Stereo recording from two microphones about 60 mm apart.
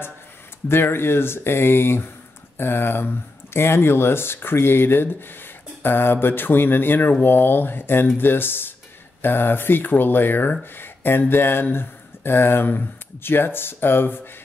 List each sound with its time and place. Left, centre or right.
0.7 s speech: left